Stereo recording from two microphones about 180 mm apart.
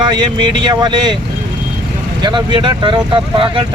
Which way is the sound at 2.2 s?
25° right (ahead or behind).